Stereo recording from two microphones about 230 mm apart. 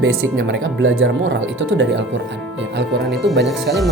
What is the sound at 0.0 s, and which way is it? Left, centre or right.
Speech, right.